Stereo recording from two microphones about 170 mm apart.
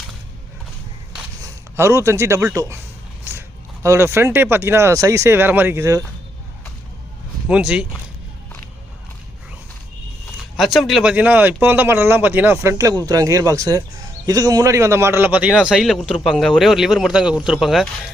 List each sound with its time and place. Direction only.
1.7 s speech: 15° right (ahead or behind)
3.3 s a sound: 15° right (ahead or behind)
3.8 s speech: 15° right (ahead or behind)
7.4 s speech: 5° right (ahead or behind)
10.6 s a man's voice: centre (ahead or behind)